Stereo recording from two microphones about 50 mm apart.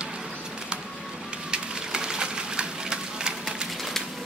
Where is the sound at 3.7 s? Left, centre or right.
Centre.